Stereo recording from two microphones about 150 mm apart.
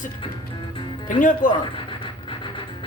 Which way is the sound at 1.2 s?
60° left (ahead or behind).